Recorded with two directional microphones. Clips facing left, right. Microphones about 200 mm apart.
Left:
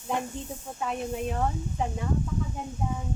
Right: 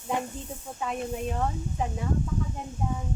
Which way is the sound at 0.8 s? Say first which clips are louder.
Even; centre (ahead or behind).